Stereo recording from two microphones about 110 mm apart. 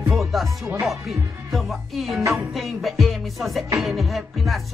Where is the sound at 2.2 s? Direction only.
25° right (ahead or behind).